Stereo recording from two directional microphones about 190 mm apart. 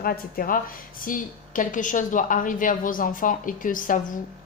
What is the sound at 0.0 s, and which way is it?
A woman's voice, 50° left (ahead or behind).